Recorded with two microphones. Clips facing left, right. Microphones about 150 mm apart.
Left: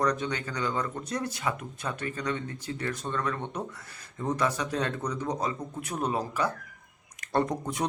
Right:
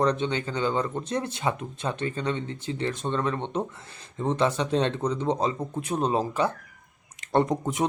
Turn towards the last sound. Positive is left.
turn(degrees=-20)  # may be behind; listen again after turning